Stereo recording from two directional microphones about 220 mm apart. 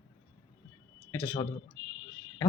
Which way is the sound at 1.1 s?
10° left (ahead or behind).